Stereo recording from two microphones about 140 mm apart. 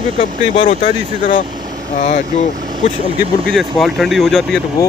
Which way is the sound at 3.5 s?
Centre (ahead or behind).